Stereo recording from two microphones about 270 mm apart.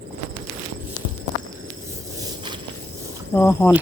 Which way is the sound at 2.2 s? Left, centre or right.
Centre.